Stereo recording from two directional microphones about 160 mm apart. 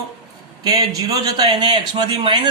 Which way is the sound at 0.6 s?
25° right (ahead or behind).